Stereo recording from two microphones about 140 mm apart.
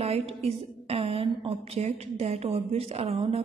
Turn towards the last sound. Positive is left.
turn(degrees=-45)  # may be behind; listen again after turning